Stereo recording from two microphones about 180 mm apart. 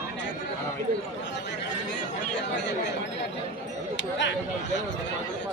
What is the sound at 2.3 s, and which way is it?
Chatter, 75° left (ahead or behind).